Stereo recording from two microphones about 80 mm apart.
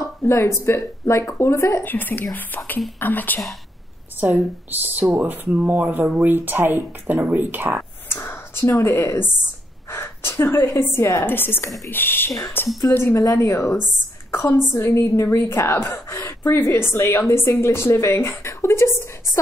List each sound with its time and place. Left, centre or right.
0.0 s speech: left
1.9 s speech: left
4.2 s speech: right
8.1 s a woman's voice: left